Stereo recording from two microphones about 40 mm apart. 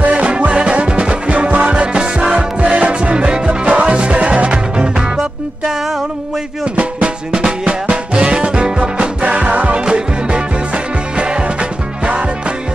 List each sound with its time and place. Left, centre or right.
0.0 s music: right
6.6 s drum: right
7.9 s music: right